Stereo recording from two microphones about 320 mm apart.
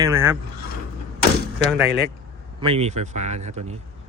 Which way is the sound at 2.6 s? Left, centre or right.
Centre.